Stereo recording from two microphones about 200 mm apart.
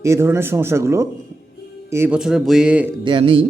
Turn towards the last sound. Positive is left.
turn(degrees=-25)  # may be behind; listen again after turning